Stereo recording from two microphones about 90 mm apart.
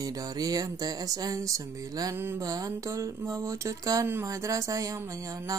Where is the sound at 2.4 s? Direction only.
40° right (ahead or behind).